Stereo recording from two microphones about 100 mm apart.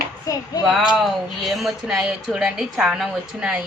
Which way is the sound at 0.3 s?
35° left (ahead or behind).